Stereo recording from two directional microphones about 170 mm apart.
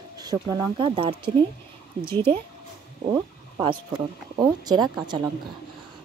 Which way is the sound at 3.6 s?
30° right (ahead or behind).